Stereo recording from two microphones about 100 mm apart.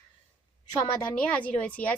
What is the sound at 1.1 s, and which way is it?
Speech, 15° left (ahead or behind).